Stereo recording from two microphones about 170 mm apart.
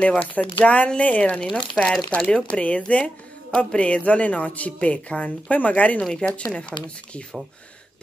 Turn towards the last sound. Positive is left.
turn(degrees=5)  # may be behind; listen again after turning